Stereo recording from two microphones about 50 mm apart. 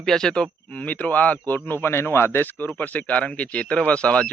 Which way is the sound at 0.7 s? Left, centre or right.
Left.